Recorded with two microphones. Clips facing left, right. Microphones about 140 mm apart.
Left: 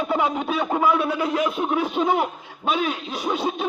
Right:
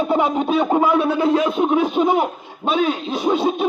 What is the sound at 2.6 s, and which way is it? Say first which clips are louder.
A man's voice: right 5 dB; 25° right (ahead or behind).